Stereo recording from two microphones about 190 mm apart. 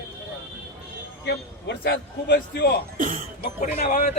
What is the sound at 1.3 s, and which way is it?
A man's voice, 60° left (ahead or behind).